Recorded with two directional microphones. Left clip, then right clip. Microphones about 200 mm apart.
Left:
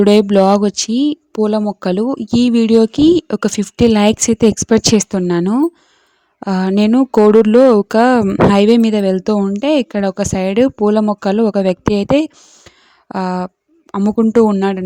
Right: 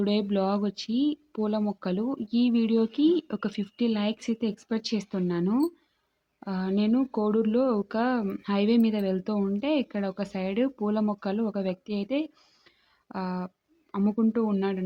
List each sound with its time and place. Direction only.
0.0 s speech: 50° left (ahead or behind)